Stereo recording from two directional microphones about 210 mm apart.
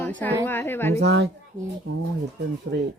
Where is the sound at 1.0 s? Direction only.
55° right (ahead or behind).